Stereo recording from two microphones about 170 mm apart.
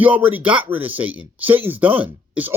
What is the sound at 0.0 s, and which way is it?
Speech, 10° right (ahead or behind).